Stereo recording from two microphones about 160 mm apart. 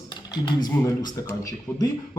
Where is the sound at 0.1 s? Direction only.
25° left (ahead or behind).